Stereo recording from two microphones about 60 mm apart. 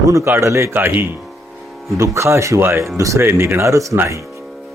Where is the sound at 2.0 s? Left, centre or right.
Right.